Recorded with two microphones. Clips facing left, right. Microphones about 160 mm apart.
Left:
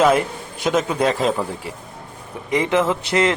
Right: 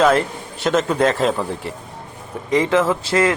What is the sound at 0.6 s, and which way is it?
A man's voice, centre (ahead or behind).